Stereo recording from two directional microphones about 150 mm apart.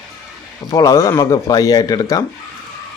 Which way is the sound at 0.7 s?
25° left (ahead or behind).